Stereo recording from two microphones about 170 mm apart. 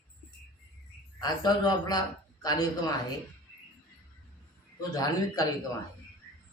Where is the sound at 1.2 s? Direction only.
25° left (ahead or behind).